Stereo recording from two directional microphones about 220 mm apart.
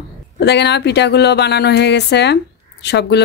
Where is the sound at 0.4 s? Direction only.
50° left (ahead or behind).